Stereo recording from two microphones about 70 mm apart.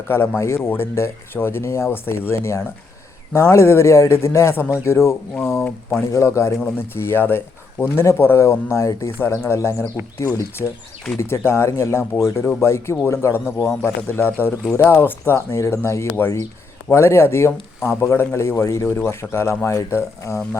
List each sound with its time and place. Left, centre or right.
0.1 s speech: left
6.6 s speech: left
11.2 s speech: left
18.9 s speech: left